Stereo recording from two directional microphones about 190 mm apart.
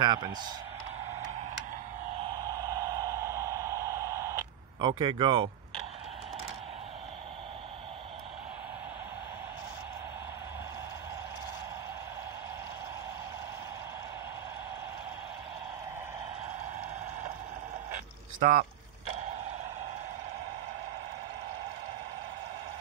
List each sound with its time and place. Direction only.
0.0 s speech: 25° right (ahead or behind)
2.7 s a sound: 20° right (ahead or behind)
18.4 s boat: 45° right (ahead or behind)